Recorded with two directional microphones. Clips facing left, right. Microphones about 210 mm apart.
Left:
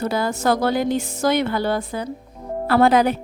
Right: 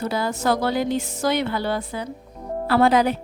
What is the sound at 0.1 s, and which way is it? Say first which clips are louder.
Speech: left 1 dB; 50° left (ahead or behind).